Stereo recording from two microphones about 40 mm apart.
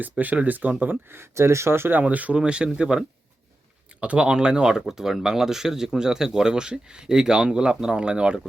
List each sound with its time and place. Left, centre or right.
0.0 s speech: right
1.1 s speech: right
1.9 s speech: right
2.4 s speech: right
4.0 s speech: right
4.4 s speech: centre
4.8 s speech: centre; by 8.4 s right